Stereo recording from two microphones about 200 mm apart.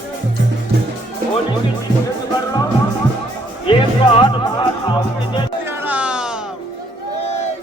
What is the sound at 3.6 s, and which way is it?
Music, 25° left (ahead or behind).